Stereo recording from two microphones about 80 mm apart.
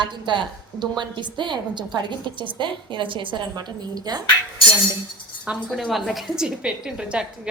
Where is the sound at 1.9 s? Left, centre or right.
Right.